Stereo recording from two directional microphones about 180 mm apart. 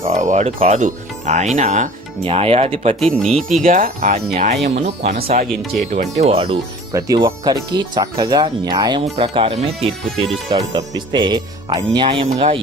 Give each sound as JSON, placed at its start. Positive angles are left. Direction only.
{"t": 0.0, "sound": "speech", "side_deg": -40}
{"t": 3.0, "sound": "speech", "side_deg": 0}
{"t": 3.6, "sound": "speech", "side_deg": -50}
{"t": 5.1, "sound": "speech", "side_deg": -55}
{"t": 5.9, "sound": "speech", "side_deg": -40}
{"t": 6.9, "sound": "speech", "side_deg": -20}